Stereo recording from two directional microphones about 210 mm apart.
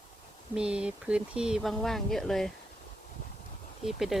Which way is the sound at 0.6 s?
5° right (ahead or behind).